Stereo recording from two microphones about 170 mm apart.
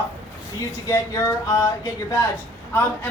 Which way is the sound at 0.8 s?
20° left (ahead or behind).